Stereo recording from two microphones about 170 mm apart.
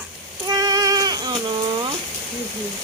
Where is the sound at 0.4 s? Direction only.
25° right (ahead or behind).